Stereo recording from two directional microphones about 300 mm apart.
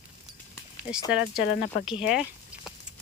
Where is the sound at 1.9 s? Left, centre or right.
Centre.